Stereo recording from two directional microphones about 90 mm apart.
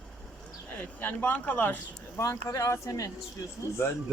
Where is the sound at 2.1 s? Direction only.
35° left (ahead or behind).